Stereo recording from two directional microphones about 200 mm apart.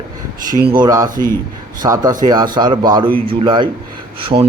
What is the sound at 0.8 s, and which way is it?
Speech, 15° right (ahead or behind).